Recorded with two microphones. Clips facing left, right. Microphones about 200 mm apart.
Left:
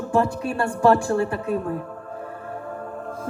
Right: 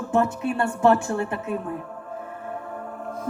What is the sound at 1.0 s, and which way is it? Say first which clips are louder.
Speech: left 4 dB; 35° left (ahead or behind).